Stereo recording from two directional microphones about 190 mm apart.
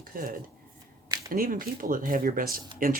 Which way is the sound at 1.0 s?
20° right (ahead or behind).